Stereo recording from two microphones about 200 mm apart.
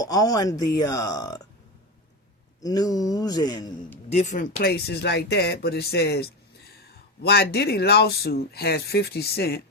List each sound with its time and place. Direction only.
0.0 s speech: 20° left (ahead or behind)
2.6 s speech: 20° left (ahead or behind)
4.1 s speech: 35° left (ahead or behind); by 9.6 s 50° left (ahead or behind)